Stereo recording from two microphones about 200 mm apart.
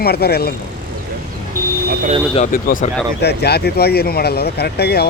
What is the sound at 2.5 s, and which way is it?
Speech, 45° left (ahead or behind).